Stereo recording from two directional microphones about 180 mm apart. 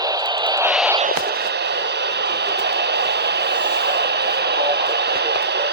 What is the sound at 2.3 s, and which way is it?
Vehicle, 70° right (ahead or behind).